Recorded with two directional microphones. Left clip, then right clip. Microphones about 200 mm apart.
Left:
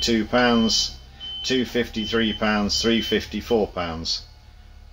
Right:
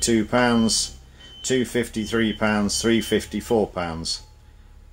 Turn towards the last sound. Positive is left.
turn(degrees=-30)  # may be behind; listen again after turning